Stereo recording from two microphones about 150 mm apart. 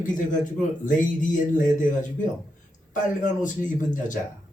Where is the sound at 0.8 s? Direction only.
60° left (ahead or behind).